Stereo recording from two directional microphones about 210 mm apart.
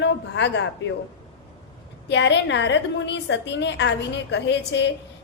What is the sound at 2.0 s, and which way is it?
A woman's voice, 55° left (ahead or behind).